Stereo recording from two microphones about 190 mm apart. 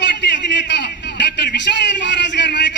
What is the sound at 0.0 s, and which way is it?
A man's voice, 65° left (ahead or behind).